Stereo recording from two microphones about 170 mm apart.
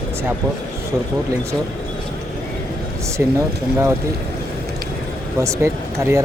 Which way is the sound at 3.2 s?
10° right (ahead or behind).